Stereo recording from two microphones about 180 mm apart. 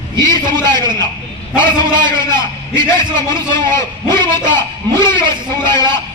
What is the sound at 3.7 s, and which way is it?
A man's voice, 15° left (ahead or behind).